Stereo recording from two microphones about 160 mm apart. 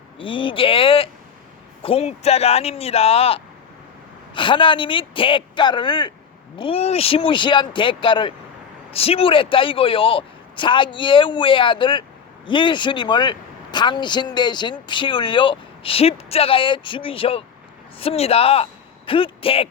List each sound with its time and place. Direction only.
0.2 s speech: 30° left (ahead or behind)